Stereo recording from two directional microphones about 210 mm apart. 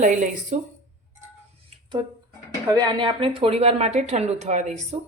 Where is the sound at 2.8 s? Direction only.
20° right (ahead or behind).